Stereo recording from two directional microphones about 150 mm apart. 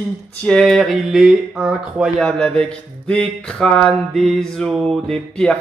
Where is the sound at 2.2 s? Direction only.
5° left (ahead or behind).